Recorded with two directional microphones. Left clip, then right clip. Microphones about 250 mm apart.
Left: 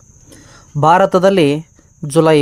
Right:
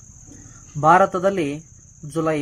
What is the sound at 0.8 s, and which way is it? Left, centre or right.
Speech, left.